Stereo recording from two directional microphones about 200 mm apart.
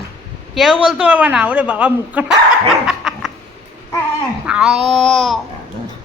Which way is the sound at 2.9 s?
Centre (ahead or behind).